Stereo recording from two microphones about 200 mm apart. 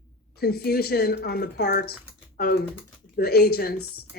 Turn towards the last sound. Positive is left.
turn(degrees=50)  # may be behind; listen again after turning